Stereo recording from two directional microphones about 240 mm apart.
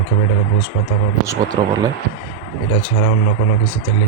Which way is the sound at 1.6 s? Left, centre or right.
Centre.